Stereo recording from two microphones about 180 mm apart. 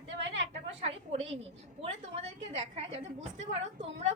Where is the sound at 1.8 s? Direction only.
35° right (ahead or behind).